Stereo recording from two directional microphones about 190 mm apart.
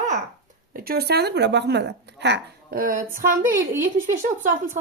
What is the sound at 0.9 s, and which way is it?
A woman's voice, 55° right (ahead or behind).